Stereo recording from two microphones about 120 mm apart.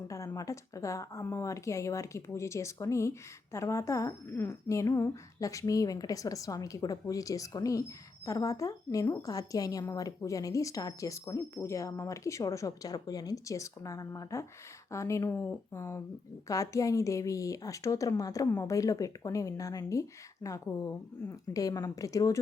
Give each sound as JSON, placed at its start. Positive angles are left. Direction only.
{"t": 0.3, "sound": "speech", "side_deg": 25}